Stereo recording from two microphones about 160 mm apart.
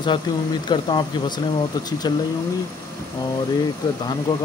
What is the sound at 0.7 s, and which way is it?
Speech, 30° left (ahead or behind).